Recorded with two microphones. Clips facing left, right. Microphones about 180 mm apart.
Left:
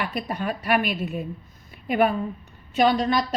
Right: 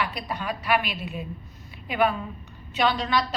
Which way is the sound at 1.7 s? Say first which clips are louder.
Left 7 dB; 45° left (ahead or behind).